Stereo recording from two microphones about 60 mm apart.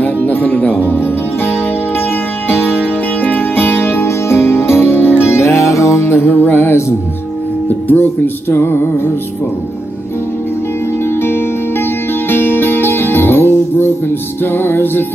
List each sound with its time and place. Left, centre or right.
0.0 s music: left
7.9 s music: left
11.1 s music: left